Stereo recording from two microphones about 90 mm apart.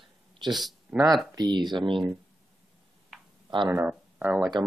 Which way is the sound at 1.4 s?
55° right (ahead or behind).